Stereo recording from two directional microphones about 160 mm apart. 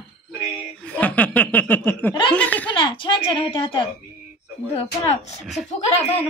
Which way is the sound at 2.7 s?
30° left (ahead or behind).